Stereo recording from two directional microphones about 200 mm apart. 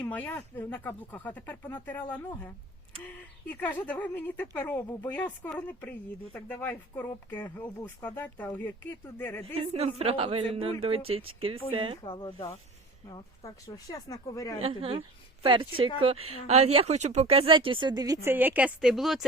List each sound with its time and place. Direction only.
0.0 s speech: 10° left (ahead or behind)
3.5 s speech: 10° left (ahead or behind)
9.6 s speech: 30° right (ahead or behind)
12.0 s speech: 25° left (ahead or behind)
14.6 s speech: 30° right (ahead or behind); by 19.2 s centre (ahead or behind)